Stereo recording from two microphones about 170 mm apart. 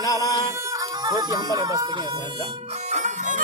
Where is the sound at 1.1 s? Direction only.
20° right (ahead or behind).